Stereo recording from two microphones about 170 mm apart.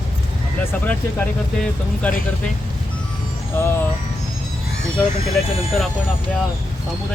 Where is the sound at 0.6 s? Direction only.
10° left (ahead or behind).